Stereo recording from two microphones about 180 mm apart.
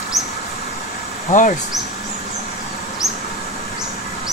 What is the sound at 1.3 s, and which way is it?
Speech, 45° left (ahead or behind).